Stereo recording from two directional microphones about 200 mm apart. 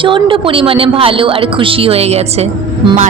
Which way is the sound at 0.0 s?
25° right (ahead or behind).